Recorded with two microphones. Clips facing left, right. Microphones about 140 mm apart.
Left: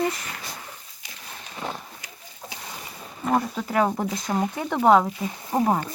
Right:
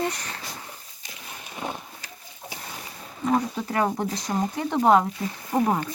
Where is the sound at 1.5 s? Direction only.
15° right (ahead or behind).